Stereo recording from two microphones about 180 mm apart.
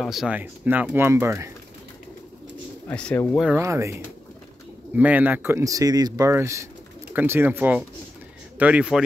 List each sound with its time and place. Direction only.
0.0 s speech: centre (ahead or behind)
2.9 s speech: 5° left (ahead or behind)
3.5 s speech: 15° right (ahead or behind)
4.9 s speech: 10° right (ahead or behind)